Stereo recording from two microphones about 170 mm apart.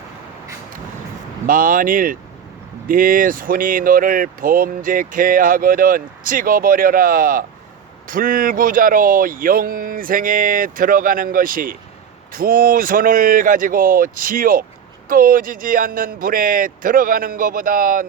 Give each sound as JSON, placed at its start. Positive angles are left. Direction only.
{"t": 1.5, "sound": "speech", "side_deg": -55}